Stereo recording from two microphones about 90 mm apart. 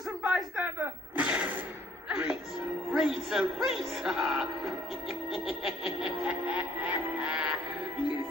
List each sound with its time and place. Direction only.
0.3 s gasp: 15° right (ahead or behind)
2.0 s music: 10° right (ahead or behind)
2.9 s speech: centre (ahead or behind)
6.0 s music: 10° right (ahead or behind)